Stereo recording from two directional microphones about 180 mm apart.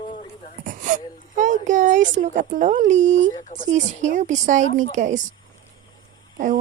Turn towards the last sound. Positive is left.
turn(degrees=-45)  # may be behind; listen again after turning